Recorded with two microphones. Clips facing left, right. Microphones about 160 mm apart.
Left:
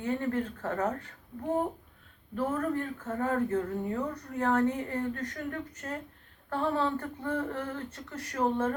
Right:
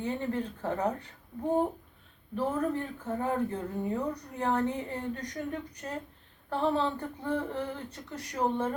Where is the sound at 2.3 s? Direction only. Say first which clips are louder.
Even; 20° right (ahead or behind).